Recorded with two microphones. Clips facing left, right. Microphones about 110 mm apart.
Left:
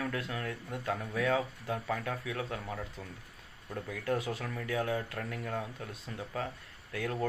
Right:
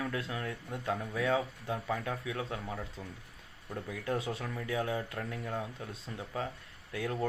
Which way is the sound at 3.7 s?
20° right (ahead or behind).